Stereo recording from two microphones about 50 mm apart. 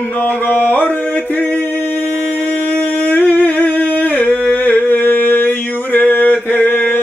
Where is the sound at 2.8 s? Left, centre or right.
Left.